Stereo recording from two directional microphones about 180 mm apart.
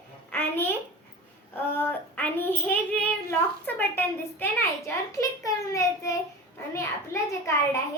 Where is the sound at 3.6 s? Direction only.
10° left (ahead or behind).